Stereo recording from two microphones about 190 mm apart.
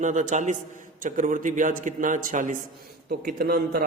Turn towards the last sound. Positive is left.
turn(degrees=-50)  # may be behind; listen again after turning